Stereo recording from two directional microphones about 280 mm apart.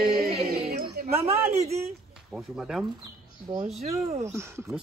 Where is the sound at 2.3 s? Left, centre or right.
Centre.